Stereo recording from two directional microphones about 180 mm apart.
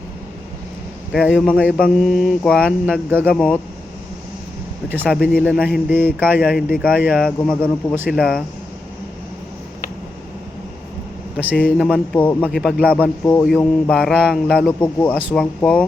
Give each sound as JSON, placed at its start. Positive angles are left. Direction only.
{"t": 1.1, "sound": "speech", "side_deg": 0}
{"t": 5.0, "sound": "speech", "side_deg": 5}
{"t": 6.0, "sound": "speech", "side_deg": -10}
{"t": 11.5, "sound": "speech", "side_deg": 5}